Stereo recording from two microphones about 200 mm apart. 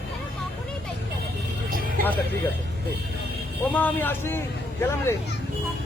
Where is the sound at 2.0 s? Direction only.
45° right (ahead or behind).